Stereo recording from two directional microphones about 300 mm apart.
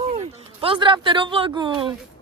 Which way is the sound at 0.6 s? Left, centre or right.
Centre.